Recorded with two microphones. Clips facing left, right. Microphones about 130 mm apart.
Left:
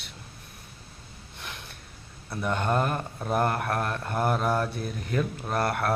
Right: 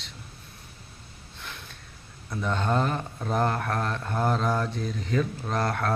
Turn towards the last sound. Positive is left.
turn(degrees=10)  # may be behind; listen again after turning